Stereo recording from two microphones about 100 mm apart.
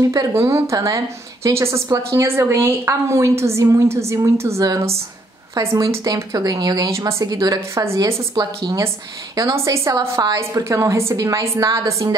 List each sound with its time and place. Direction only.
0.0 s a woman's voice: 35° right (ahead or behind)
7.3 s a woman's voice: 40° right (ahead or behind)
7.8 s a woman's voice: 30° right (ahead or behind)